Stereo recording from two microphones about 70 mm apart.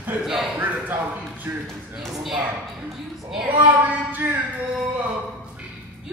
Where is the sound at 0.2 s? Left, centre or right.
Centre.